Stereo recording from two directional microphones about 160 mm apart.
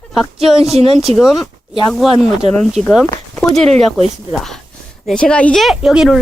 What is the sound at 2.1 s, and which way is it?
Speech, 40° right (ahead or behind).